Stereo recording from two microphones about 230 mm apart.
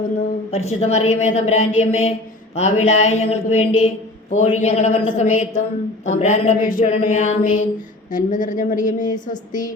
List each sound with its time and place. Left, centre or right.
0.5 s a woman's voice: left
2.6 s mantra: left